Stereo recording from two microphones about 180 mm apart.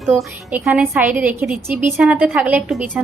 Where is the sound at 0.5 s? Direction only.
10° right (ahead or behind).